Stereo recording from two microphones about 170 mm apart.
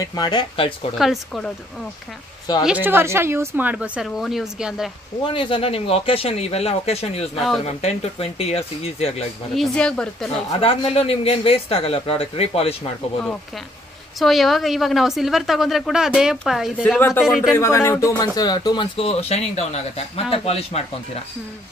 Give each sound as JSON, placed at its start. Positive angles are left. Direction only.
{"t": 0.0, "sound": "speech", "side_deg": 25}
{"t": 0.9, "sound": "a woman's voice", "side_deg": 0}
{"t": 2.6, "sound": "speech", "side_deg": -10}
{"t": 5.2, "sound": "a man's voice", "side_deg": 30}
{"t": 7.3, "sound": "a woman's voice", "side_deg": 0}
{"t": 7.6, "sound": "a man's voice", "side_deg": 35}
{"t": 9.6, "sound": "a woman's voice", "side_deg": 5}
{"t": 10.6, "sound": "a man's voice", "side_deg": 35}
{"t": 14.2, "sound": "a woman's voice", "side_deg": 0}
{"t": 17.6, "sound": "speech", "side_deg": 15}